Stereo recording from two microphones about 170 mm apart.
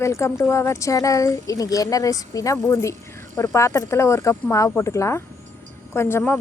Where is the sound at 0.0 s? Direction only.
15° left (ahead or behind).